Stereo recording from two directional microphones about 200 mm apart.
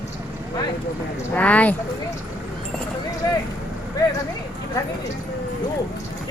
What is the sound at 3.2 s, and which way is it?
Speech, 15° left (ahead or behind).